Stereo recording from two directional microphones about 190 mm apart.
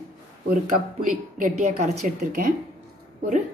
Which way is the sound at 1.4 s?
40° right (ahead or behind).